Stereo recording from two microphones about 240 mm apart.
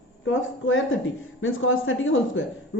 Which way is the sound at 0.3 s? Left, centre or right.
Left.